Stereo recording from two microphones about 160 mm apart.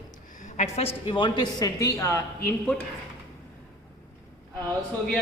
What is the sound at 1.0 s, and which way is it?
A man's voice, 30° left (ahead or behind).